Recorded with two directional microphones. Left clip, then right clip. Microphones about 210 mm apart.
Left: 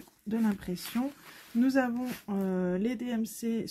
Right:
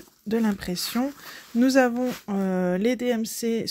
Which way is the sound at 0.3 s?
35° right (ahead or behind).